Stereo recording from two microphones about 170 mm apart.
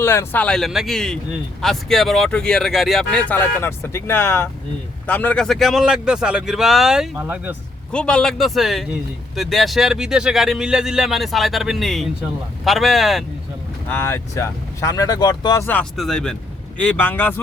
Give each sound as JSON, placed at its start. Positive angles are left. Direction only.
{"t": 0.0, "sound": "a man's voice", "side_deg": 15}
{"t": 7.9, "sound": "a man's voice", "side_deg": 5}
{"t": 13.9, "sound": "speech", "side_deg": 15}
{"t": 15.6, "sound": "speech", "side_deg": 5}